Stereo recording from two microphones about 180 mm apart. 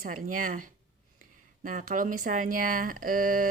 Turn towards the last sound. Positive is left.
turn(degrees=-50)  # may be behind; listen again after turning